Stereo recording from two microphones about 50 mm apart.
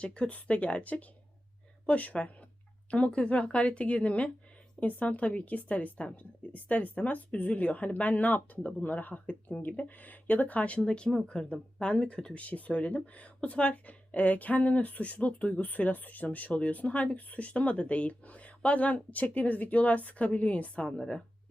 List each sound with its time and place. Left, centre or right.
0.0 s speech: left